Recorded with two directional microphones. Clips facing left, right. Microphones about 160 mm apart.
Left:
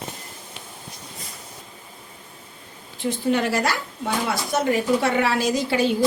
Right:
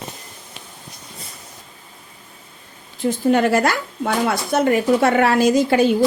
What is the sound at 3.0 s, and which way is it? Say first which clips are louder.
Speech: right 5 dB; 50° right (ahead or behind).